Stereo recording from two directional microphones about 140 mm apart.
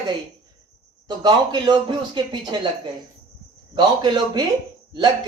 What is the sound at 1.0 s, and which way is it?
Speech, 30° right (ahead or behind).